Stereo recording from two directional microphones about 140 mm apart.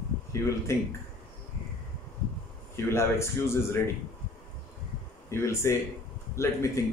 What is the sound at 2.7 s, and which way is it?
A man's voice, 20° left (ahead or behind).